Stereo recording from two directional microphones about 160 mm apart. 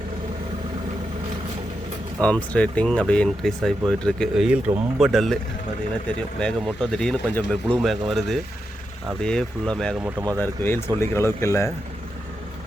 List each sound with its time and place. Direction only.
2.2 s speech: 10° left (ahead or behind)
6.4 s speech: 5° left (ahead or behind)
10.2 s speech: 20° right (ahead or behind)
10.4 s speech: 15° left (ahead or behind)